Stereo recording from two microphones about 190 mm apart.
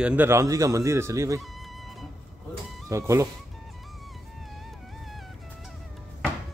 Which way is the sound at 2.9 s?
15° right (ahead or behind).